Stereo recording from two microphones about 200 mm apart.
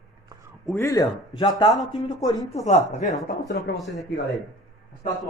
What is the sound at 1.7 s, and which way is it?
Speech, centre (ahead or behind).